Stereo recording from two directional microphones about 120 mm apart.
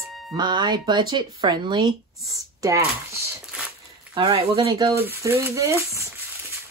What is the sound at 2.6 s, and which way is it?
Speech, 25° right (ahead or behind).